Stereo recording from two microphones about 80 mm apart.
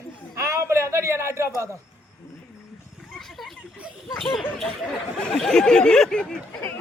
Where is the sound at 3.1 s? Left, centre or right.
Centre.